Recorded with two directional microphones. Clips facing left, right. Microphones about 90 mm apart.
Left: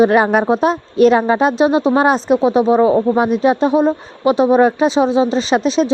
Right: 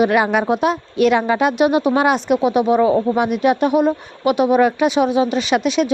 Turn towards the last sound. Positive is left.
turn(degrees=30)  # may be behind; listen again after turning